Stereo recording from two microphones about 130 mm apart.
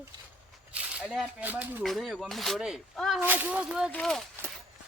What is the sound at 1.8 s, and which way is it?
Speech, centre (ahead or behind).